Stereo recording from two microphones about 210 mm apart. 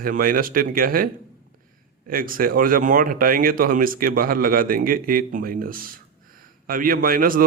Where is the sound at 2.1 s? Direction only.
40° right (ahead or behind).